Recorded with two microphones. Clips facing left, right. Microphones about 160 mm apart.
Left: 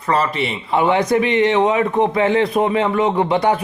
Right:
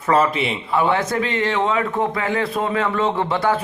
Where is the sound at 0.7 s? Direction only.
20° left (ahead or behind).